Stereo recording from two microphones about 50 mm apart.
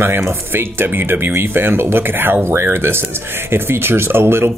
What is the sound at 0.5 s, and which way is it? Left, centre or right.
Speech, right.